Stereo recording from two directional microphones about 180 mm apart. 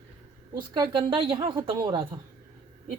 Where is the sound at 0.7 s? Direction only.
20° right (ahead or behind).